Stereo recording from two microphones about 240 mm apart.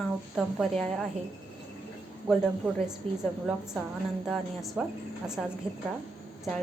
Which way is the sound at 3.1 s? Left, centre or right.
Right.